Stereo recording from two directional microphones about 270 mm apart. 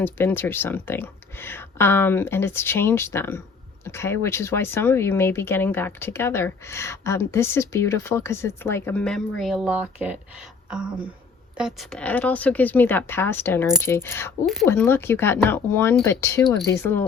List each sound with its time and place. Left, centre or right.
0.0 s speech: centre